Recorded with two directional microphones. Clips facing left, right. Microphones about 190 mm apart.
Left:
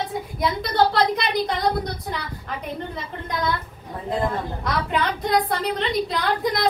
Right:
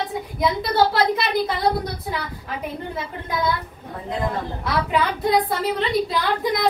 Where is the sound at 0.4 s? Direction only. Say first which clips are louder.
Right 1 dB; 5° right (ahead or behind).